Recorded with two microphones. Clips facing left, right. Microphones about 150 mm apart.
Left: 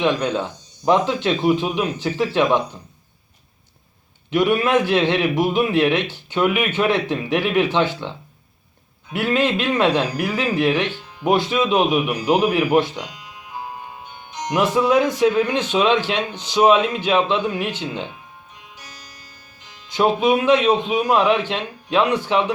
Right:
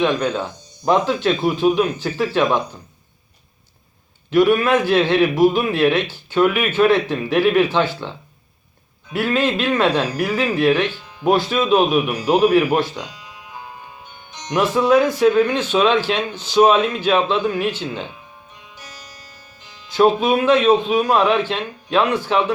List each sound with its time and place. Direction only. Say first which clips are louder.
0.0 s speech: right 1 dB; 20° left (ahead or behind)
4.3 s speech: right 3 dB; 20° left (ahead or behind)
9.1 s speech: even; 20° left (ahead or behind)
14.8 s a man's voice: right 2 dB; 20° left (ahead or behind)
19.9 s a man's voice: right 2 dB; 15° left (ahead or behind)